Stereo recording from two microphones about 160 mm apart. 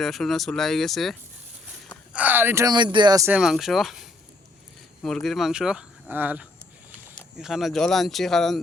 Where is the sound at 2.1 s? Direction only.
10° right (ahead or behind).